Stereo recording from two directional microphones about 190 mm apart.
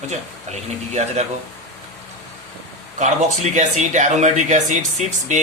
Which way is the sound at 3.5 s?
40° right (ahead or behind).